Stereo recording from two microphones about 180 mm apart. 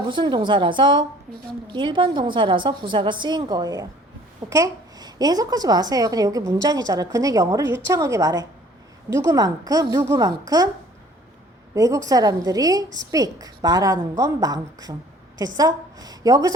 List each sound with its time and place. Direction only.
0.1 s a child's voice: 25° right (ahead or behind)
1.3 s a woman's voice: centre (ahead or behind)
1.6 s a child's voice: 25° right (ahead or behind)
11.7 s a child's voice: 20° right (ahead or behind)